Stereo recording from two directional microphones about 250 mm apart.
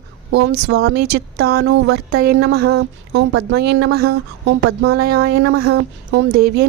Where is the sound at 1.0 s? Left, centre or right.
Right.